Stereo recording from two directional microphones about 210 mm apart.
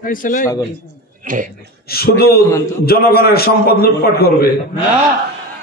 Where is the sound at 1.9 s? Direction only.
50° left (ahead or behind).